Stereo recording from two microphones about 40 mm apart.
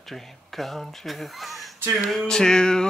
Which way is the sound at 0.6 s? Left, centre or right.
Centre.